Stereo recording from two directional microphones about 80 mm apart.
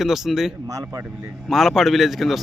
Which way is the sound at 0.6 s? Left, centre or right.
Right.